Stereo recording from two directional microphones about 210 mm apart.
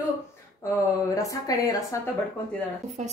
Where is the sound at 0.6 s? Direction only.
15° left (ahead or behind).